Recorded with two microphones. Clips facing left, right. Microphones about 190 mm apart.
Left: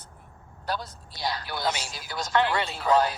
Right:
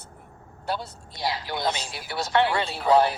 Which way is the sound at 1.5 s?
25° right (ahead or behind).